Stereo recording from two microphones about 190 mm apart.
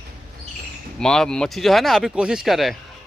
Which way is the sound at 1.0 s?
5° left (ahead or behind).